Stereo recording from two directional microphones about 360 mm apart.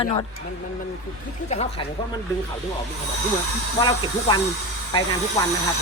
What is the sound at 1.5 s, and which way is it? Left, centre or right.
Speech, centre.